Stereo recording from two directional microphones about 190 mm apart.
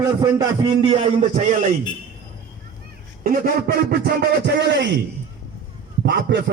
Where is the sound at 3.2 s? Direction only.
50° right (ahead or behind).